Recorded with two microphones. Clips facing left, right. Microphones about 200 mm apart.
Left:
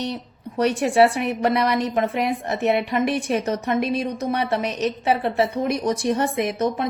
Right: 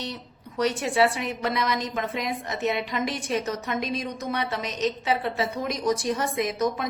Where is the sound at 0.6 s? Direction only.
65° left (ahead or behind).